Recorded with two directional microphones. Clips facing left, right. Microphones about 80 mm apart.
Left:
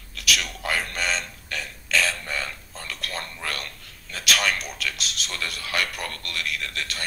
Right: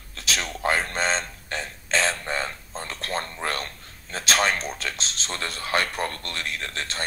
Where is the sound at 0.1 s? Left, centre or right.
Right.